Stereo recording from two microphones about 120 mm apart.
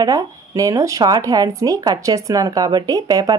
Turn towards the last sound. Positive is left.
turn(degrees=-30)  # may be behind; listen again after turning